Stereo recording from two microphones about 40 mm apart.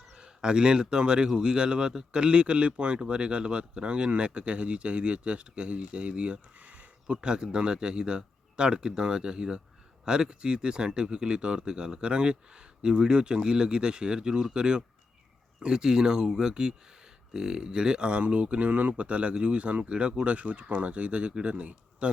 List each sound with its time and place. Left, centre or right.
0.1 s speech: centre